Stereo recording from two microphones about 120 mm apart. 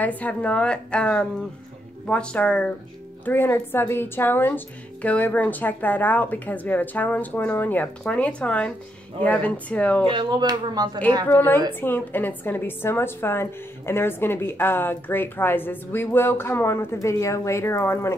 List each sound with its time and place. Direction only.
0.0 s a woman's voice: 15° left (ahead or behind)
10.0 s speech: 40° right (ahead or behind)
11.2 s a woman's voice: 15° left (ahead or behind)